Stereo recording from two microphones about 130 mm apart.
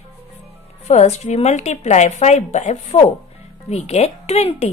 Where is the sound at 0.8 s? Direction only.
60° left (ahead or behind).